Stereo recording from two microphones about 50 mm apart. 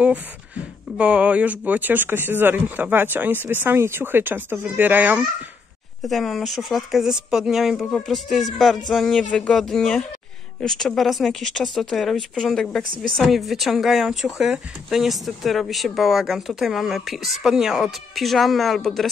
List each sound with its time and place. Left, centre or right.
0.9 s speech: right
3.7 s speech: right
6.0 s a woman's voice: centre
17.8 s a woman's voice: centre